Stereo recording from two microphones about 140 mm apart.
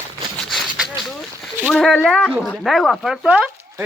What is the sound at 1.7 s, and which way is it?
Speech, centre (ahead or behind).